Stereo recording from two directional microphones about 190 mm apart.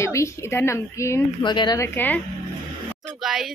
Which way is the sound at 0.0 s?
15° left (ahead or behind).